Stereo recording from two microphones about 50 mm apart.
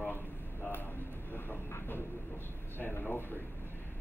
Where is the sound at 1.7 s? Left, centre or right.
Left.